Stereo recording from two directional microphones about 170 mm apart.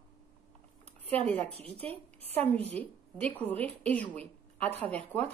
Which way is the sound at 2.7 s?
10° left (ahead or behind).